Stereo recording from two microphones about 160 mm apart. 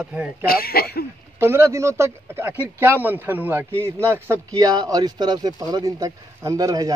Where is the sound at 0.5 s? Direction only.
70° left (ahead or behind).